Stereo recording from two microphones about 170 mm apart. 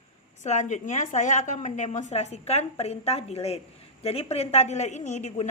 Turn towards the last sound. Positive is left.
turn(degrees=45)  # may be behind; listen again after turning